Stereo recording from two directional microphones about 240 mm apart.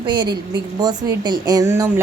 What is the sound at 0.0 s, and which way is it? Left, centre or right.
Speech, centre.